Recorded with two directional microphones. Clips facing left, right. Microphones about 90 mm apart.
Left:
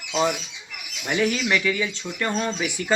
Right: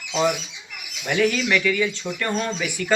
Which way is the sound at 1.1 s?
25° left (ahead or behind).